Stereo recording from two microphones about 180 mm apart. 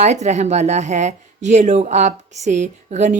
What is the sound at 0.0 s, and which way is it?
A woman's voice, 40° right (ahead or behind).